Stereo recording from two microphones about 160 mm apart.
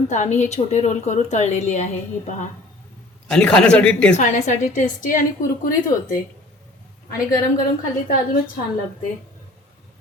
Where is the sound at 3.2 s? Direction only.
5° left (ahead or behind).